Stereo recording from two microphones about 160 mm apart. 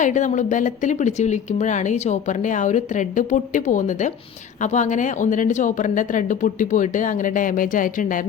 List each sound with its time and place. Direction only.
0.0 s a woman's voice: 50° left (ahead or behind)